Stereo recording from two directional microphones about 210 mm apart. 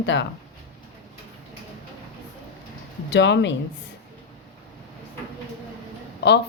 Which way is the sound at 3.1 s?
55° left (ahead or behind).